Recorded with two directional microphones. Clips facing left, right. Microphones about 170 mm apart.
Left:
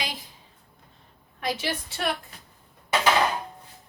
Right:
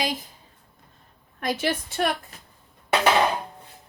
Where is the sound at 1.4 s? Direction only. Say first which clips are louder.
Right 4 dB; 50° right (ahead or behind).